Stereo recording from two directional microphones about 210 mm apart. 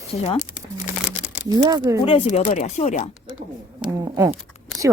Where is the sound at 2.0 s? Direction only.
25° left (ahead or behind).